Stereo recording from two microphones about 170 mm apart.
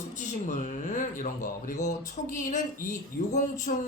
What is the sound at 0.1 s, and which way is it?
Speech, 45° left (ahead or behind).